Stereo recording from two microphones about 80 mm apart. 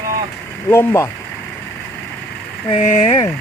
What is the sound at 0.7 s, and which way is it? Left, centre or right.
Speech, left.